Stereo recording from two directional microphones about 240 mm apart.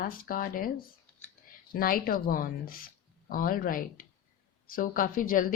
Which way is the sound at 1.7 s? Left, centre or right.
Left.